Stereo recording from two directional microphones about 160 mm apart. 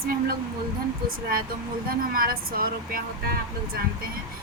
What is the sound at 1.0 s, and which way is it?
Speech, 65° right (ahead or behind).